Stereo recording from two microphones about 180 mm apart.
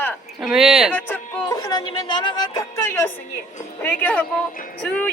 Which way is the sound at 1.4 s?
20° left (ahead or behind).